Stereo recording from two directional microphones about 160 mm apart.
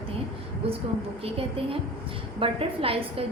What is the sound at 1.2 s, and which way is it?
A woman's voice, 35° right (ahead or behind).